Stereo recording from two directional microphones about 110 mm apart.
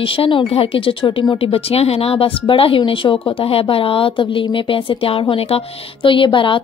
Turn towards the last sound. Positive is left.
turn(degrees=50)  # may be behind; listen again after turning